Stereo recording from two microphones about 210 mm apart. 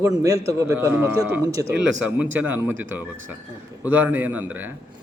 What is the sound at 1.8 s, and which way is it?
Speech, 60° right (ahead or behind).